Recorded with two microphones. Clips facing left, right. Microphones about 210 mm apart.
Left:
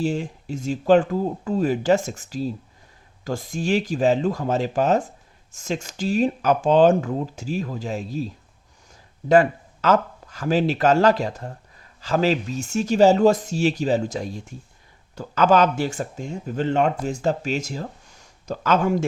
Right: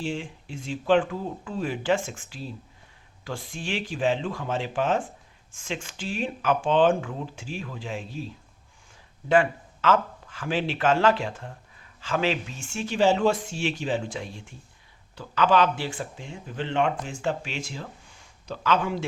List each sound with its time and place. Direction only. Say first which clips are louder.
0.0 s speech: left 7 dB; 40° left (ahead or behind)
9.3 s speech: left 5 dB; 40° left (ahead or behind)